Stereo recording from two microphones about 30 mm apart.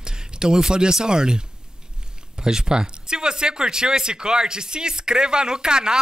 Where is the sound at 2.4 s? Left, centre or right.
Right.